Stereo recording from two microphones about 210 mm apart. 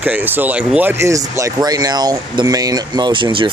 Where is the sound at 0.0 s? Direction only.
10° right (ahead or behind).